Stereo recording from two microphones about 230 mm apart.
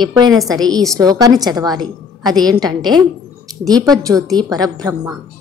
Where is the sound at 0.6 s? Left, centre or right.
Centre.